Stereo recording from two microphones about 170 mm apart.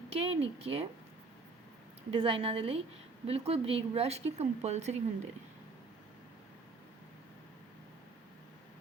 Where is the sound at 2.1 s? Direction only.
30° right (ahead or behind).